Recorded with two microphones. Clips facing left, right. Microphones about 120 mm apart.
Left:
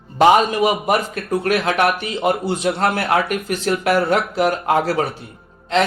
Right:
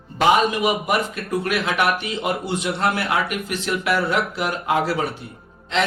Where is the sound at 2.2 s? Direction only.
35° left (ahead or behind).